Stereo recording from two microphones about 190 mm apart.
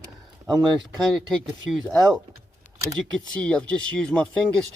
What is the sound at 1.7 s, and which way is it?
Speech, centre (ahead or behind).